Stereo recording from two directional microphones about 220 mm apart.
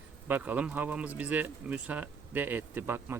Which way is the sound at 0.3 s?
10° right (ahead or behind).